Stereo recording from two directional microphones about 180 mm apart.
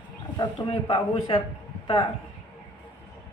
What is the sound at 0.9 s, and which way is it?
Speech, 25° left (ahead or behind).